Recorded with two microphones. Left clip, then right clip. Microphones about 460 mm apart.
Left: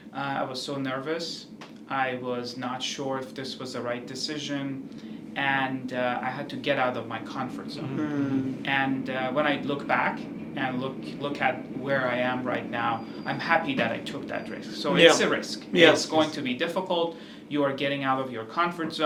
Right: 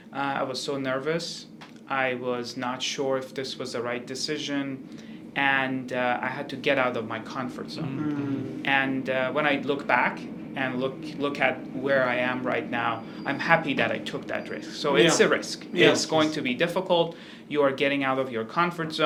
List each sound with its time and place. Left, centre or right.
0.2 s a man's voice: right
8.6 s a man's voice: right